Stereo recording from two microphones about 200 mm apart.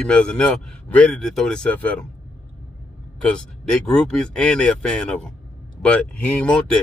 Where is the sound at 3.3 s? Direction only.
5° left (ahead or behind).